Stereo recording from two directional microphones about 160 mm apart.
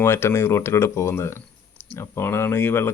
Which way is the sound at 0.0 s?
15° left (ahead or behind).